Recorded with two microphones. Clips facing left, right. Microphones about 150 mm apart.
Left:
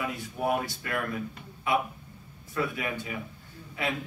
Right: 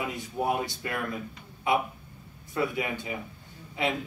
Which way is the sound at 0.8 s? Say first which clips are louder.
Left 1 dB; 25° right (ahead or behind).